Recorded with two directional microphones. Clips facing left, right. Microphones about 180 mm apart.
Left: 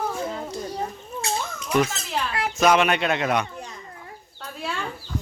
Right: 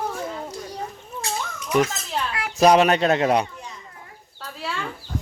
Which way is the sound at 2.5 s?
35° right (ahead or behind).